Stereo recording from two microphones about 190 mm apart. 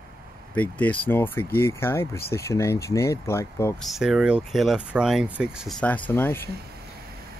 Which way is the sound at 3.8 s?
Centre (ahead or behind).